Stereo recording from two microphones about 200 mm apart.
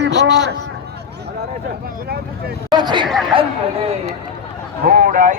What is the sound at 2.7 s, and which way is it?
Speech, 20° right (ahead or behind).